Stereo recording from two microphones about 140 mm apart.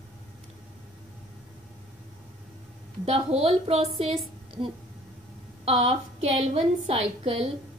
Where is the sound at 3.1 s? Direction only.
45° right (ahead or behind).